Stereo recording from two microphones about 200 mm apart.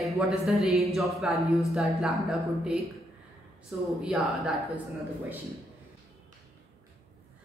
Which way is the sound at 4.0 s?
Centre (ahead or behind).